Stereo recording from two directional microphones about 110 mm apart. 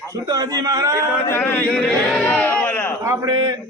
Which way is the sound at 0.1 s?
35° right (ahead or behind).